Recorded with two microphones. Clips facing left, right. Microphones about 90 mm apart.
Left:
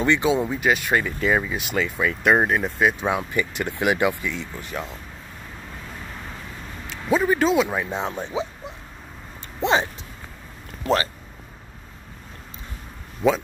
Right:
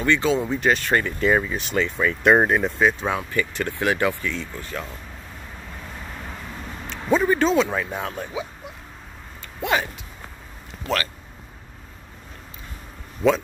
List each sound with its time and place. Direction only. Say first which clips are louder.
0.0 s speech: left 1 dB; 15° left (ahead or behind)
6.9 s speech: right 1 dB; 5° left (ahead or behind); by 9.8 s 25° left (ahead or behind)
13.2 s speech: right 1 dB; 15° right (ahead or behind)